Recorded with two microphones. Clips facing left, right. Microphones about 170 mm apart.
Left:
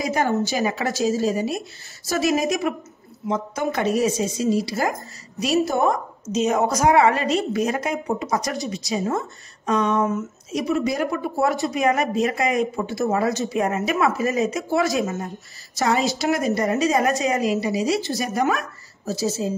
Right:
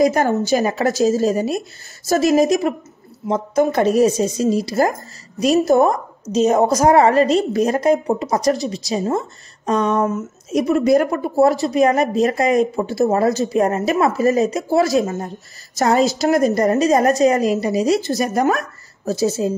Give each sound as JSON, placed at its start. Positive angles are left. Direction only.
{"t": 0.0, "sound": "a woman's voice", "side_deg": -40}
{"t": 19.0, "sound": "speech", "side_deg": -55}